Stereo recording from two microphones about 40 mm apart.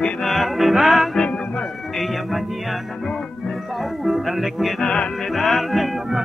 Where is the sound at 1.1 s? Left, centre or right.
Left.